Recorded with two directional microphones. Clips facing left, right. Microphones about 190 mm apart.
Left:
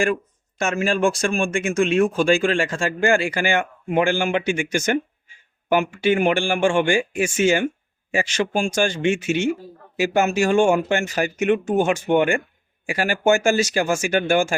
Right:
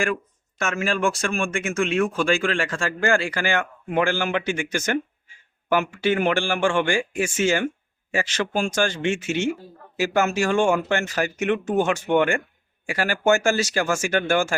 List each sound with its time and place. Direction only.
1.1 s a man's voice: 15° left (ahead or behind)